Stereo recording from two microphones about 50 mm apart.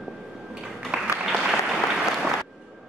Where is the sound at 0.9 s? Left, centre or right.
Right.